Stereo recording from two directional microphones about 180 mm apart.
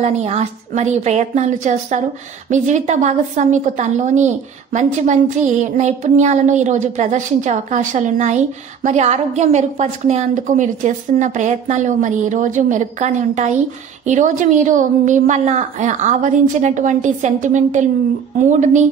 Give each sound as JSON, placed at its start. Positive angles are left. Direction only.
{"t": 0.0, "sound": "a woman's voice", "side_deg": -40}